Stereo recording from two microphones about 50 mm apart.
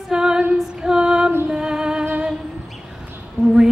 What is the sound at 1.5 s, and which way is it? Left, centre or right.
Music, centre.